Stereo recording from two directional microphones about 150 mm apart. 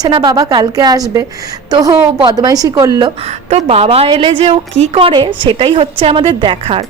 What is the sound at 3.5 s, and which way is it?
A woman's voice, 45° right (ahead or behind).